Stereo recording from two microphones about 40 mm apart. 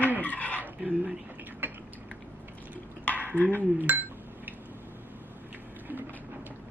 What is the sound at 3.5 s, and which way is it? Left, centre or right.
Speech, right.